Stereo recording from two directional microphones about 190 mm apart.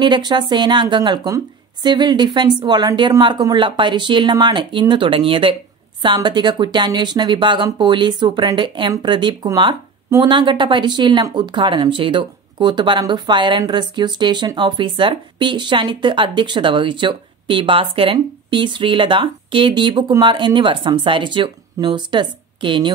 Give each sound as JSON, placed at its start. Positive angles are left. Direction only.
{"t": 0.0, "sound": "speech", "side_deg": -25}